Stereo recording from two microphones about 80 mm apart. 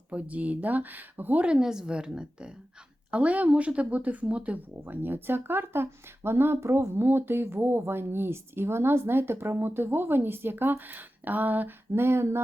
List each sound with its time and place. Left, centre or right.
0.1 s speech: centre
4.8 s speech: right